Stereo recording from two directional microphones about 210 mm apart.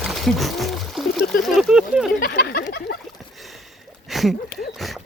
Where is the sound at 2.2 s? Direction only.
50° left (ahead or behind).